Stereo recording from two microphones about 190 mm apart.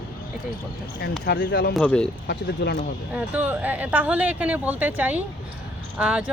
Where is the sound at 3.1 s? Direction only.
10° right (ahead or behind).